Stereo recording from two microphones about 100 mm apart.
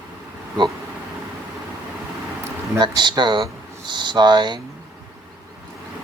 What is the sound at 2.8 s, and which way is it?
Speech, 50° right (ahead or behind).